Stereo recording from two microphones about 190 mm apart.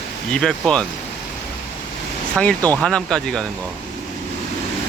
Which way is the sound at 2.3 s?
5° left (ahead or behind).